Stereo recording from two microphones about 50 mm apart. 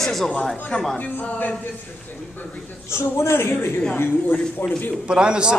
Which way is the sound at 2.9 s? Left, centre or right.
Left.